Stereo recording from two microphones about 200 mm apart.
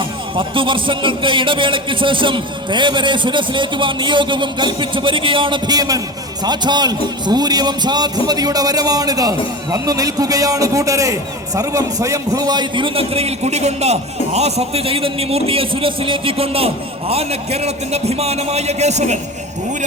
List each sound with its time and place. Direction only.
0.3 s a man's voice: 25° right (ahead or behind)